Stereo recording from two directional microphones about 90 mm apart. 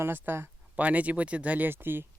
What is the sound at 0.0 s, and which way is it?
Speech, 25° right (ahead or behind).